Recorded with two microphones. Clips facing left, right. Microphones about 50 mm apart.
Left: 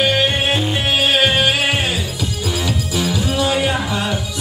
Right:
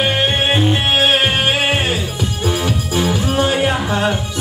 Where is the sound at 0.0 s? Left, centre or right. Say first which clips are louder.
Even; right.